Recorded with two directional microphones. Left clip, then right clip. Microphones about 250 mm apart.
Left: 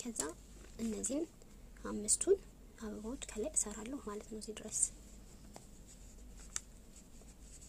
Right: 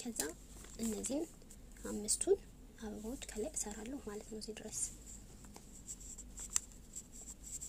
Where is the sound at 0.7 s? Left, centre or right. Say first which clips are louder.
Left 1 dB; centre.